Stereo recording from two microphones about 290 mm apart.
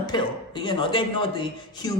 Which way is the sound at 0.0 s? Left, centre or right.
Centre.